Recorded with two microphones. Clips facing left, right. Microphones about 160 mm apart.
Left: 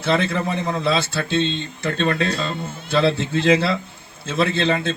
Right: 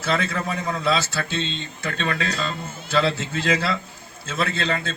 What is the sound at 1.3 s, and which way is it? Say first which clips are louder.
Speech: left 7 dB; 60° left (ahead or behind).